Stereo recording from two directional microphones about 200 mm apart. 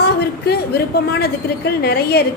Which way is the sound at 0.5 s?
50° left (ahead or behind).